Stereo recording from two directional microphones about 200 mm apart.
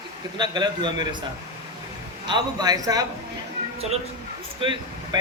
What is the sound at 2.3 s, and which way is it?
Speech, 20° right (ahead or behind).